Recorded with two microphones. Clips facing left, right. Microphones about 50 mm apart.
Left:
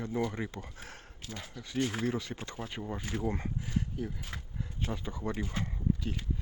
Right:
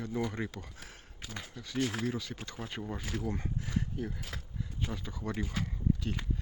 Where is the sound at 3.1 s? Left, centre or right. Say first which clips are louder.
Left 3 dB; left.